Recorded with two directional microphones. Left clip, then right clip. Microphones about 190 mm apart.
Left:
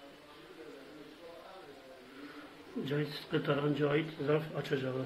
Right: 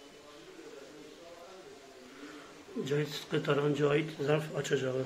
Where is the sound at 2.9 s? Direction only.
15° right (ahead or behind).